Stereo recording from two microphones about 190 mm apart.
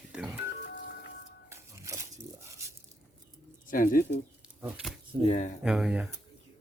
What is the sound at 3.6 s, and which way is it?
Speech, 45° left (ahead or behind).